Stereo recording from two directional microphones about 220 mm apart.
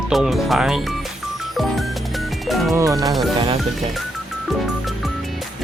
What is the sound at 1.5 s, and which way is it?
Music, centre (ahead or behind).